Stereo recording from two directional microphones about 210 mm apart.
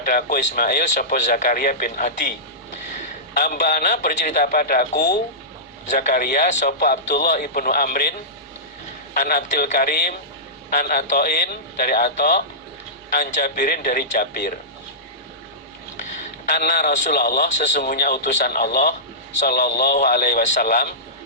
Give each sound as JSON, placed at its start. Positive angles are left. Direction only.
{"t": 0.0, "sound": "speech", "side_deg": 40}
{"t": 3.3, "sound": "a man's voice", "side_deg": 40}
{"t": 9.1, "sound": "a man's voice", "side_deg": 40}
{"t": 12.0, "sound": "speech", "side_deg": 35}
{"t": 16.5, "sound": "speech", "side_deg": 40}